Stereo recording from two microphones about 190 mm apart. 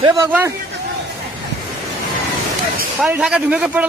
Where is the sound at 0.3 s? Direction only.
10° right (ahead or behind).